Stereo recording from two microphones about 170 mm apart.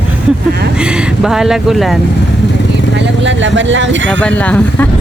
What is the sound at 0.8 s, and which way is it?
Speech, 5° right (ahead or behind).